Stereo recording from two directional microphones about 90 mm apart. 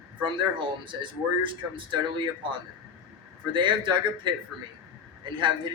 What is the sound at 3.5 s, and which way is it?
Speech, 60° right (ahead or behind).